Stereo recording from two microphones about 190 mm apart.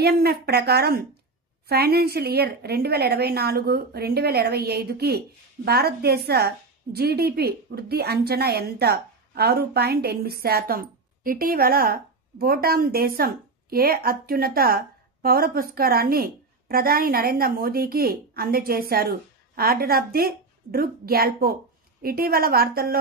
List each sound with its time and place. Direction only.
0.0 s a woman's voice: 55° right (ahead or behind)